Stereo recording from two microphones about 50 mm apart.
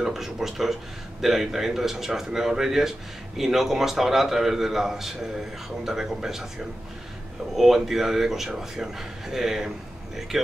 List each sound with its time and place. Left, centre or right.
0.0 s a man's voice: centre
7.5 s a man's voice: centre